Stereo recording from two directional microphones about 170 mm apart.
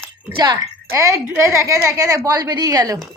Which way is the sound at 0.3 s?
20° right (ahead or behind).